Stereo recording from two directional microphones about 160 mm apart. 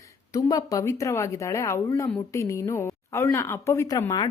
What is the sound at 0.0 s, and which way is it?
A woman's voice, 20° left (ahead or behind).